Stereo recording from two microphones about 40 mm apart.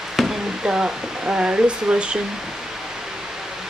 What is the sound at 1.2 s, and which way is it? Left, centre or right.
Speech, right.